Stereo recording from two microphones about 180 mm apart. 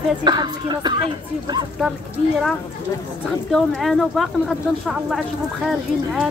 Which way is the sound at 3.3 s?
Centre (ahead or behind).